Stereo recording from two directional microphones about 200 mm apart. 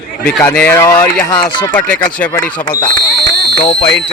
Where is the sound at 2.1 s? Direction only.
5° left (ahead or behind).